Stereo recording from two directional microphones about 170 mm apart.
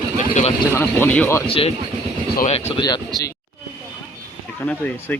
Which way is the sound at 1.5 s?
35° left (ahead or behind).